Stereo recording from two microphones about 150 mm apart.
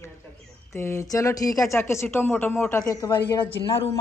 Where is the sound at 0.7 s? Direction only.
20° left (ahead or behind).